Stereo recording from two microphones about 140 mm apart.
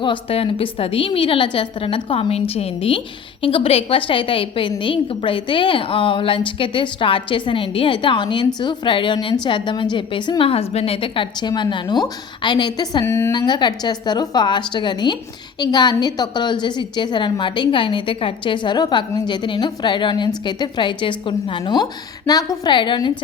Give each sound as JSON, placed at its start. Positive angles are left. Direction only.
{"t": 0.0, "sound": "a woman's voice", "side_deg": 40}
{"t": 13.1, "sound": "a woman's voice", "side_deg": 20}
{"t": 13.3, "sound": "a woman's voice", "side_deg": 30}